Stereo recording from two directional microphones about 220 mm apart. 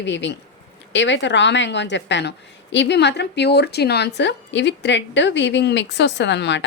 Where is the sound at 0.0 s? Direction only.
55° left (ahead or behind).